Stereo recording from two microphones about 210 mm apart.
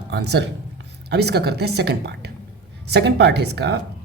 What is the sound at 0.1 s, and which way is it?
A woman's voice, 55° right (ahead or behind).